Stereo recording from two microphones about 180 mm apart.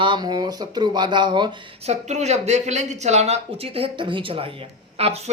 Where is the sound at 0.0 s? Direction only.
25° right (ahead or behind).